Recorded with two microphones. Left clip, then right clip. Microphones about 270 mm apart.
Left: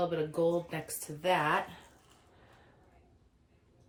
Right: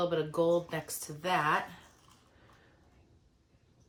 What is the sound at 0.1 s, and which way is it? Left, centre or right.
Speech, centre.